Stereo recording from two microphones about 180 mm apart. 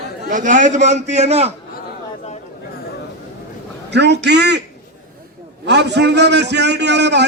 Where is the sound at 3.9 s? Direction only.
70° right (ahead or behind).